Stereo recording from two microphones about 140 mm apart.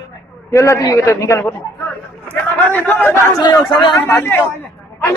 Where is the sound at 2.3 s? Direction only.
15° left (ahead or behind).